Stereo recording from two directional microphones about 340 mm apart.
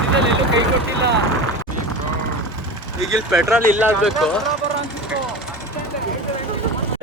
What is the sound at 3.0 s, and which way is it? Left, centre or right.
Speech, centre.